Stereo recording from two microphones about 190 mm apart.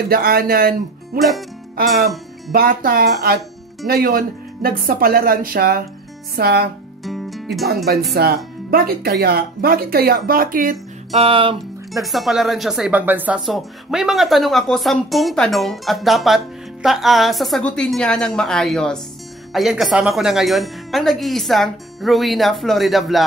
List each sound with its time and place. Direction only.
0.1 s speech: 50° right (ahead or behind)
7.1 s music: centre (ahead or behind)
7.6 s speech: 55° right (ahead or behind)
11.1 s music: 30° right (ahead or behind)
12.0 s speech: centre (ahead or behind)